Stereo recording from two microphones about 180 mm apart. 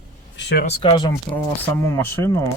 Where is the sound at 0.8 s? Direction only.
25° left (ahead or behind).